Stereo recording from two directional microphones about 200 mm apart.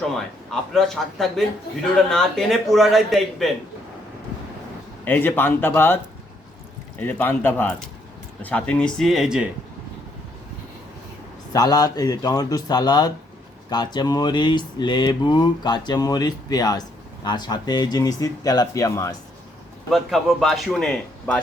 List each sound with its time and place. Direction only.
0.5 s a man's voice: centre (ahead or behind)
5.0 s a man's voice: 10° left (ahead or behind)
7.0 s a man's voice: 10° left (ahead or behind)
11.5 s speech: 20° left (ahead or behind)
19.9 s a man's voice: centre (ahead or behind)